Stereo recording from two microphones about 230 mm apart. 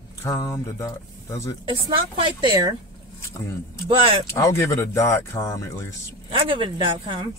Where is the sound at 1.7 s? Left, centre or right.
Right.